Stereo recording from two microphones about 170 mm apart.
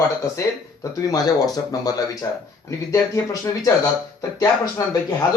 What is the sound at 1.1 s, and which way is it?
A man's voice, 20° left (ahead or behind).